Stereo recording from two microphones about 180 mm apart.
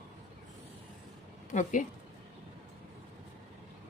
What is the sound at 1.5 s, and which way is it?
Speech, 45° left (ahead or behind).